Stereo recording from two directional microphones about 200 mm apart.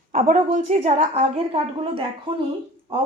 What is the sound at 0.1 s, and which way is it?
A woman's voice, 40° right (ahead or behind).